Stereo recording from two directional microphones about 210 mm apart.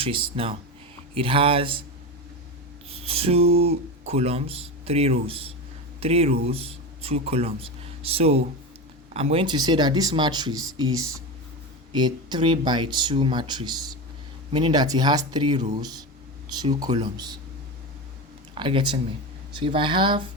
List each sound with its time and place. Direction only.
0.0 s speech: 25° right (ahead or behind)
2.9 s speech: 25° right (ahead or behind)
18.5 s speech: 25° right (ahead or behind)